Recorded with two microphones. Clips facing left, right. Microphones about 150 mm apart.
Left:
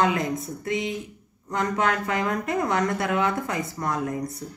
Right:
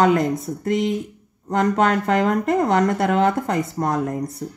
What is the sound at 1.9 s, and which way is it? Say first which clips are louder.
Speech: right 7 dB; 50° right (ahead or behind).